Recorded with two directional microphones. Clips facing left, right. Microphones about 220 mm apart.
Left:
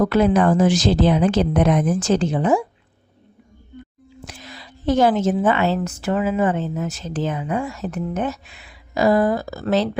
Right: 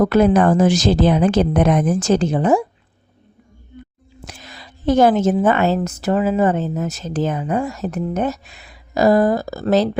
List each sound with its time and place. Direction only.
0.0 s a woman's voice: 45° right (ahead or behind)
4.3 s a woman's voice: 45° right (ahead or behind)